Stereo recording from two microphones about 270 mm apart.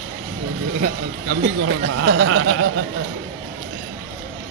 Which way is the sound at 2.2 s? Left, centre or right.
Right.